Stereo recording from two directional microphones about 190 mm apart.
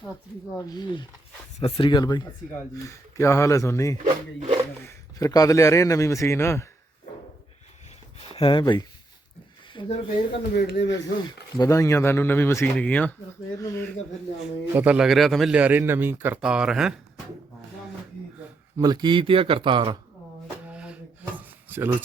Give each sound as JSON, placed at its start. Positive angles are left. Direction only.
{"t": 0.6, "sound": "speech", "side_deg": 20}
{"t": 3.9, "sound": "speech", "side_deg": -40}
{"t": 4.8, "sound": "speech", "side_deg": 15}
{"t": 8.3, "sound": "speech", "side_deg": 30}
{"t": 10.3, "sound": "speech", "side_deg": 55}
{"t": 11.5, "sound": "speech", "side_deg": 15}
{"t": 14.8, "sound": "a man's voice", "side_deg": -5}
{"t": 18.8, "sound": "speech", "side_deg": -20}
{"t": 20.7, "sound": "a sound", "side_deg": -5}